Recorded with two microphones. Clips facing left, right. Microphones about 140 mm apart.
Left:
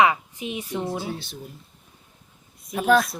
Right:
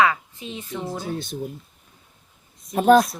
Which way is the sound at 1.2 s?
45° right (ahead or behind).